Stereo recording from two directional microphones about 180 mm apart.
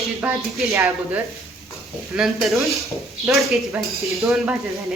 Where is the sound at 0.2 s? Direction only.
15° right (ahead or behind).